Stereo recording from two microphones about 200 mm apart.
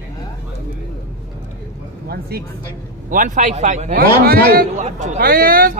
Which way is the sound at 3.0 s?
40° right (ahead or behind).